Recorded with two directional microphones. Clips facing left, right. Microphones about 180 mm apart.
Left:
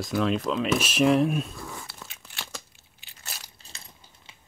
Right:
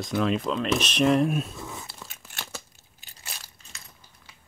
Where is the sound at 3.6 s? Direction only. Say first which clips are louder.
Left 1 dB; 35° left (ahead or behind).